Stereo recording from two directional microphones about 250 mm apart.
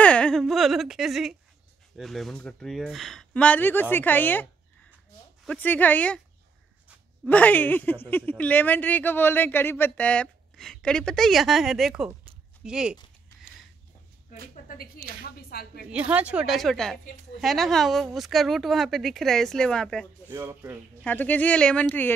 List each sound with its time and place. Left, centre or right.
0.0 s whimper: centre
2.0 s a woman's voice: centre
7.2 s a woman's voice: centre
14.5 s a sound: left
15.9 s a woman's voice: centre
20.2 s speech: centre
21.0 s speech: centre